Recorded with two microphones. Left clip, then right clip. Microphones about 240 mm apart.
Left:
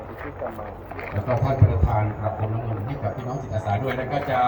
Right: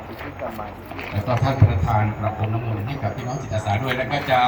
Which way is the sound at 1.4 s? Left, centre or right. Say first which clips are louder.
Right 1 dB; centre.